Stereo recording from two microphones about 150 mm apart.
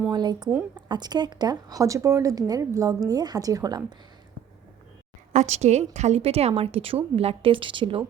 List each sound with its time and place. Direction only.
0.1 s speech: 30° right (ahead or behind)
5.3 s a woman's voice: 50° right (ahead or behind)